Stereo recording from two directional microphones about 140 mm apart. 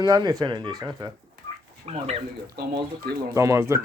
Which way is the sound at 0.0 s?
30° right (ahead or behind).